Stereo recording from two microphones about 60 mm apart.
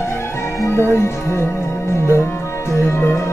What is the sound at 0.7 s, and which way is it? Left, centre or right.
Music, left.